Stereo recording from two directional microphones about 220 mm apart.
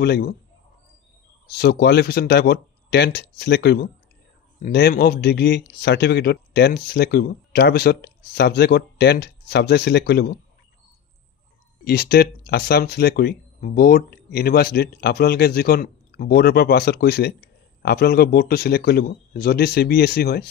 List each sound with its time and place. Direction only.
0.0 s speech: 45° left (ahead or behind)
1.5 s speech: 45° left (ahead or behind)
11.8 s speech: 45° left (ahead or behind)